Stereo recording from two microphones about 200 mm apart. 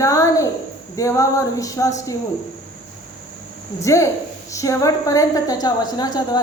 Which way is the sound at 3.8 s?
15° left (ahead or behind).